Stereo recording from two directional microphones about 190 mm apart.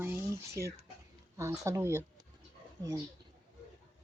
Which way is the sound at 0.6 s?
55° right (ahead or behind).